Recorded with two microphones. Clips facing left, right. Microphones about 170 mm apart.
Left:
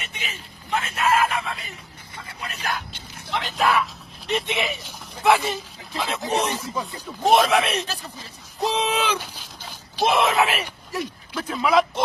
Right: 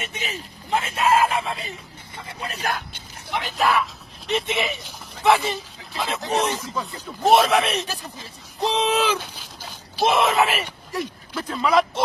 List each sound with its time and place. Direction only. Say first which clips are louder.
0.0 s speech: right 5 dB; 40° right (ahead or behind)
3.3 s speech: even; 10° right (ahead or behind)